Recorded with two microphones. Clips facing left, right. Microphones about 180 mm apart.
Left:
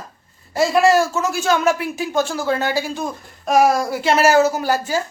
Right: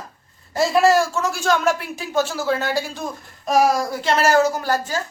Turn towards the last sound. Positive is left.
turn(degrees=10)  # may be behind; listen again after turning